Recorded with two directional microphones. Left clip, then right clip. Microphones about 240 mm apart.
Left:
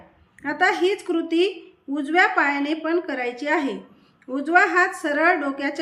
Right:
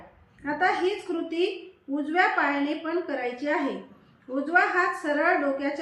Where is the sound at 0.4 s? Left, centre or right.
Left.